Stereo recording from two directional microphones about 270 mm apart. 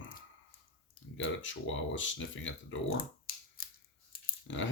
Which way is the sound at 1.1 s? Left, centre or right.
Left.